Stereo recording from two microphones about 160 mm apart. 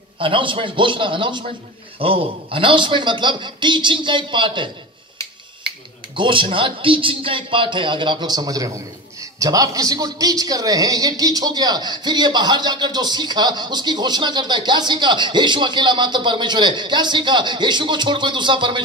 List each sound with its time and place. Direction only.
0.2 s a man's voice: 30° right (ahead or behind)
6.1 s a man's voice: 30° right (ahead or behind)